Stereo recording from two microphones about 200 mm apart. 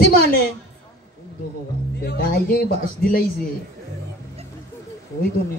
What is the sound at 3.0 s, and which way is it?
Speech, 50° left (ahead or behind).